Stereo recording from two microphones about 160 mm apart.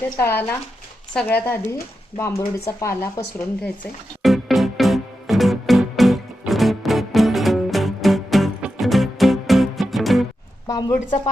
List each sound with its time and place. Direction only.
0.2 s speech: 15° left (ahead or behind)
4.2 s music: centre (ahead or behind)
10.7 s a woman's voice: 25° left (ahead or behind)